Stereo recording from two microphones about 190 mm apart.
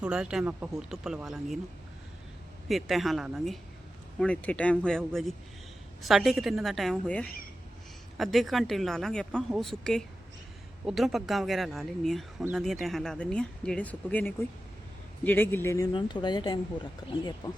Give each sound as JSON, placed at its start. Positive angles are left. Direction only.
{"t": 0.0, "sound": "speech", "side_deg": -5}
{"t": 2.6, "sound": "speech", "side_deg": 0}
{"t": 15.9, "sound": "speech", "side_deg": 25}